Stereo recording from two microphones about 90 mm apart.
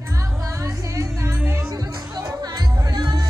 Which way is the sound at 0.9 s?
35° right (ahead or behind).